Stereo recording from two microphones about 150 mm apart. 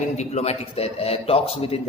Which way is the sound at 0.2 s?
45° left (ahead or behind).